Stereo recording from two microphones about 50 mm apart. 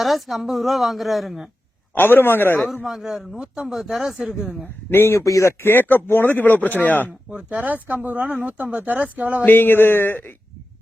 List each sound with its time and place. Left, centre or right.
0.0 s a woman's voice: centre
2.0 s a sound: left
2.8 s a man's voice: centre
4.9 s speech: left
5.2 s speech: left
5.6 s speech: left
7.3 s speech: right
9.5 s a sound: left